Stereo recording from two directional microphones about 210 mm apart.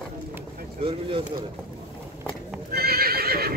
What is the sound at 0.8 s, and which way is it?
Speech, 25° right (ahead or behind).